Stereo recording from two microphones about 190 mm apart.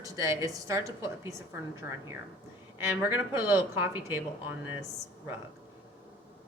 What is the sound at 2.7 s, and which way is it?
A woman's voice, 10° right (ahead or behind).